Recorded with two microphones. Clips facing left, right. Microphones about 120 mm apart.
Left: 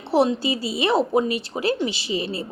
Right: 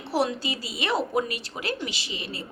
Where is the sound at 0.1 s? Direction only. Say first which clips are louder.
Left 7 dB; 25° left (ahead or behind).